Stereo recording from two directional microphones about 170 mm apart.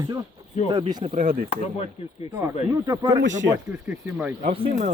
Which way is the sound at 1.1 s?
55° right (ahead or behind).